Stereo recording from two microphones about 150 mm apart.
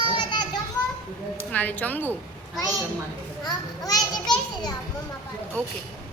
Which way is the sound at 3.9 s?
25° left (ahead or behind).